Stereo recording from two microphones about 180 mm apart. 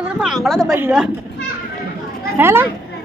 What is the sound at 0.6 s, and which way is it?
Speech, 10° right (ahead or behind).